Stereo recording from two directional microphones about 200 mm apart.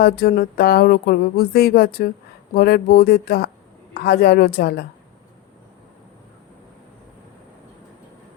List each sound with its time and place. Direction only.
0.0 s speech: 50° left (ahead or behind)